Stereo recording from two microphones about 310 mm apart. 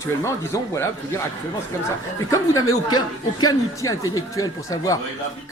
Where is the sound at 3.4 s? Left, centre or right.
Centre.